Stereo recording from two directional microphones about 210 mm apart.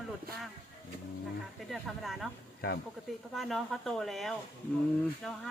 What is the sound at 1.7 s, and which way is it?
Speech, centre (ahead or behind).